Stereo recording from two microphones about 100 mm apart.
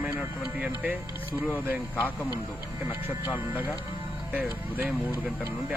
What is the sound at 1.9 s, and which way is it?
Speech, 20° left (ahead or behind).